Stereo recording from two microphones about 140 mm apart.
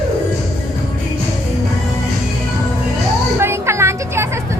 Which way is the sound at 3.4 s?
20° right (ahead or behind).